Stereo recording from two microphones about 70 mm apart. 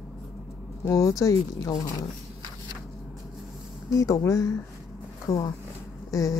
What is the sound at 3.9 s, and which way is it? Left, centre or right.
Speech, left.